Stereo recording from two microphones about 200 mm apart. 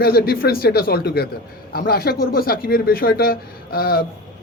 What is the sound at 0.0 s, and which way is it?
A man's voice, 50° left (ahead or behind).